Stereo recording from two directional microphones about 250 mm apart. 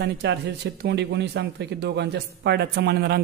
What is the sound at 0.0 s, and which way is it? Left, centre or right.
Speech, right.